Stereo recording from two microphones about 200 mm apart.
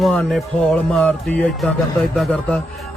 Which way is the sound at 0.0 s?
Centre (ahead or behind).